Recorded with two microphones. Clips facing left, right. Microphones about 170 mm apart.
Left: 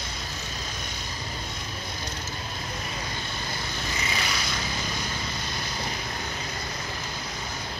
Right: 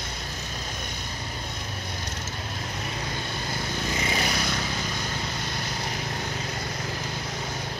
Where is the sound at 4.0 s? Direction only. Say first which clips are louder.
Right 3 dB; 50° right (ahead or behind).